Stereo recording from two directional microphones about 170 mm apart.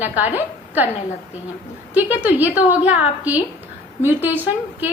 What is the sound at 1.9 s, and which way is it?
A woman's voice, 10° right (ahead or behind).